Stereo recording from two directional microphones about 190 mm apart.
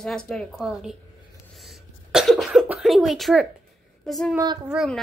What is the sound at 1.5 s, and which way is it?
Cough, centre (ahead or behind).